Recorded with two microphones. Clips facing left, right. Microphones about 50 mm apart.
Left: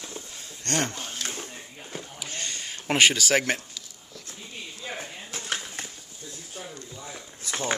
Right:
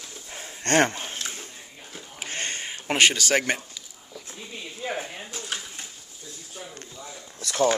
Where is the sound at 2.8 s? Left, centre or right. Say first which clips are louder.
Even; centre.